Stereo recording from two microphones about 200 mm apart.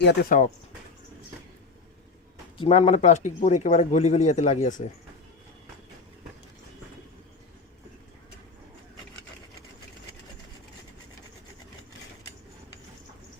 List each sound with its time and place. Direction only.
0.0 s speech: 55° left (ahead or behind)
2.6 s speech: 30° left (ahead or behind)